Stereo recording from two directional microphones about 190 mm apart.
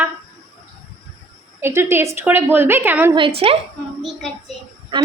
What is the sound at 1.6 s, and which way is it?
A woman's voice, 10° right (ahead or behind).